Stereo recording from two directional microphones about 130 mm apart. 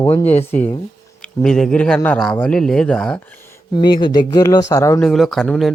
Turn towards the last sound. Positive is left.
turn(degrees=5)  # may be behind; listen again after turning